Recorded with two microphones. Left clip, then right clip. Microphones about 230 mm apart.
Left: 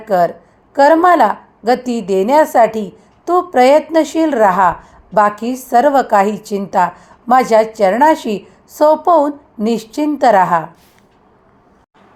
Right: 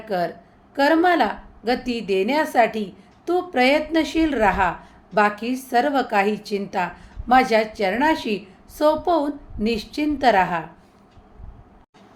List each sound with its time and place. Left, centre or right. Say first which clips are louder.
0.0 s a woman's voice: left 11 dB; left